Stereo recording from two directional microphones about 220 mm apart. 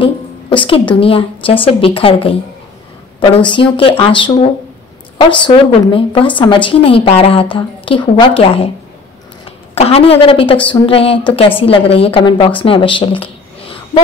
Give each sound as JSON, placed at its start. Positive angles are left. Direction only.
{"t": 0.0, "sound": "a woman's voice", "side_deg": 25}